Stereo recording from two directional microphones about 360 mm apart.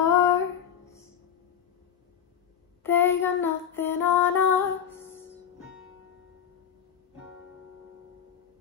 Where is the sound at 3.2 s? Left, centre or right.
Centre.